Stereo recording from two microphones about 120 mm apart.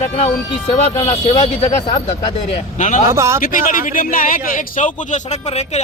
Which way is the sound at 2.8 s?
90° left.